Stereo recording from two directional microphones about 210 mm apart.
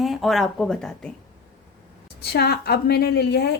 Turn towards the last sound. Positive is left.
turn(degrees=50)  # may be behind; listen again after turning